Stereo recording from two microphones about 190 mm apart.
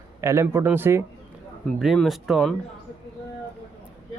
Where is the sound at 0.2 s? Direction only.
15° right (ahead or behind).